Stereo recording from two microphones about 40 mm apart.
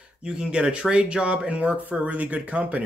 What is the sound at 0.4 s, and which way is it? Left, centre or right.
Speech, right.